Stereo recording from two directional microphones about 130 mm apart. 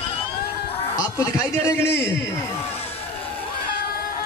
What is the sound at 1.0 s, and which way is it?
A man's voice, 25° left (ahead or behind).